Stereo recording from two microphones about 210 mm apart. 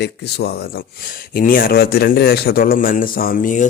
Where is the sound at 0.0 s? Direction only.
50° left (ahead or behind).